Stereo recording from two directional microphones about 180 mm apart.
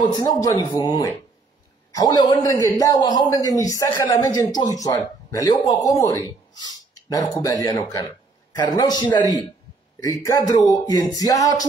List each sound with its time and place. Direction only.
0.0 s speech: 25° left (ahead or behind)